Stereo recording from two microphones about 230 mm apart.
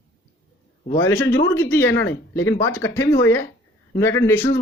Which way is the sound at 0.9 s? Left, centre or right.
Centre.